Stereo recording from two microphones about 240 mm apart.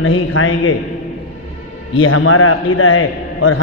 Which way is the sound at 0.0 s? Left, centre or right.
Left.